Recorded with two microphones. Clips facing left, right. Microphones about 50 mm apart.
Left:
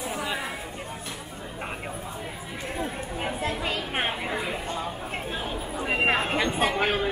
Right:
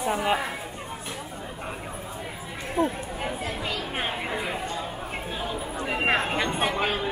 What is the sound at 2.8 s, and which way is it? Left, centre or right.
Speech, right.